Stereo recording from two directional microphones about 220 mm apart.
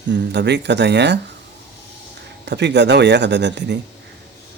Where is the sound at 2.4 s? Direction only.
50° right (ahead or behind).